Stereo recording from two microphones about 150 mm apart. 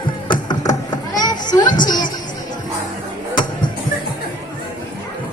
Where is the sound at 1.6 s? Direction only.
60° left (ahead or behind).